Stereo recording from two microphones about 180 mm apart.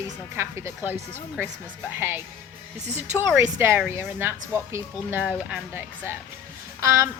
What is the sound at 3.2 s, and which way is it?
Speech, 10° right (ahead or behind).